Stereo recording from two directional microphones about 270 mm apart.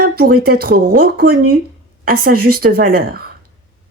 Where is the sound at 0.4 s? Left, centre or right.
Right.